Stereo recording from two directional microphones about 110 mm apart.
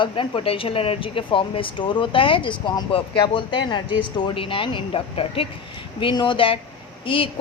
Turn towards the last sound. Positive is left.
turn(degrees=50)  # may be behind; listen again after turning